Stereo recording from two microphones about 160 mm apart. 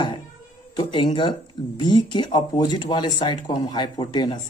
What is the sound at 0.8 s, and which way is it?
Speech, 30° left (ahead or behind).